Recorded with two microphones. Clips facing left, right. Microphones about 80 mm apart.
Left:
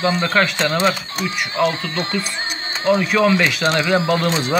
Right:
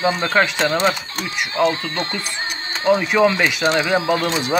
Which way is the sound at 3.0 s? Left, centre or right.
Centre.